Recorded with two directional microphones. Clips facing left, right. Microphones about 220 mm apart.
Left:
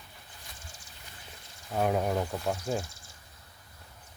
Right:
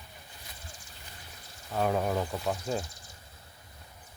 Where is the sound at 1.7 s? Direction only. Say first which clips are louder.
Left 1 dB; 10° left (ahead or behind).